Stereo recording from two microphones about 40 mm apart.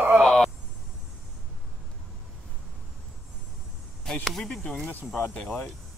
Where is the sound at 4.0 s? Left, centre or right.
Centre.